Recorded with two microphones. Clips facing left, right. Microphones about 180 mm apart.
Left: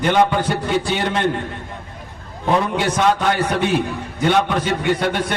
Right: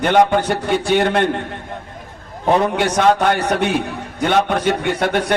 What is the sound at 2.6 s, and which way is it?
Speech, 60° right (ahead or behind).